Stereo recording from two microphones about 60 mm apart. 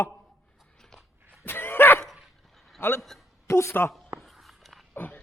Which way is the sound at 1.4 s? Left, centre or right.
Left.